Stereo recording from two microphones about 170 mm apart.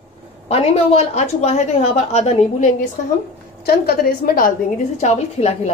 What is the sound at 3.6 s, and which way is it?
A woman's voice, 65° left (ahead or behind).